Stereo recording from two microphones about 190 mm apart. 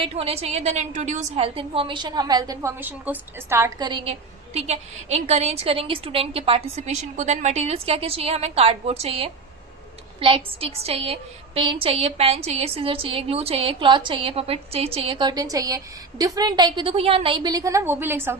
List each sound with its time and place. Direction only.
0.0 s a woman's voice: 30° right (ahead or behind)
4.5 s a woman's voice: 35° right (ahead or behind); by 18.3 s 10° right (ahead or behind)